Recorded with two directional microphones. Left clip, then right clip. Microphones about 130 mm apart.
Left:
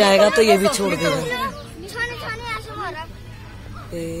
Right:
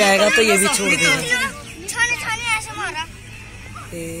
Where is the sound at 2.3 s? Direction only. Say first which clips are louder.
Right 6 dB; 90° left.